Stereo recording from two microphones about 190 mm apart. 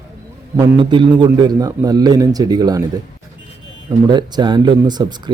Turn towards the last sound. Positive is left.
turn(degrees=-20)  # may be behind; listen again after turning